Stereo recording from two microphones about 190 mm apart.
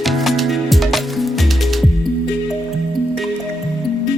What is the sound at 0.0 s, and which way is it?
Music, centre (ahead or behind).